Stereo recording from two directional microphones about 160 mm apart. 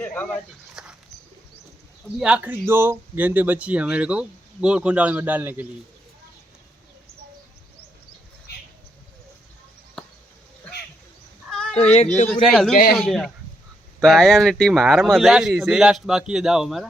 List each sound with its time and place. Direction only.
0.0 s a sound: 10° left (ahead or behind)
0.8 s bird: 5° right (ahead or behind)
2.1 s speech: 5° right (ahead or behind)
11.5 s a sound: 5° left (ahead or behind)
11.8 s speech: 40° left (ahead or behind)
12.3 s speech: centre (ahead or behind)
12.7 s speech: 70° left (ahead or behind)
13.0 s speech: centre (ahead or behind)